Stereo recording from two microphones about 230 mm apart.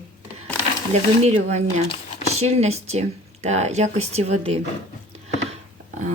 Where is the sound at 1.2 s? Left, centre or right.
Right.